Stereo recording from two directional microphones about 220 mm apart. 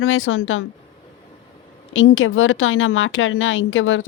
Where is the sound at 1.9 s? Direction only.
65° left (ahead or behind).